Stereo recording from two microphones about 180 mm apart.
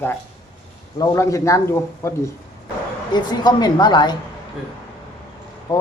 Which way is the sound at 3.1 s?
25° left (ahead or behind).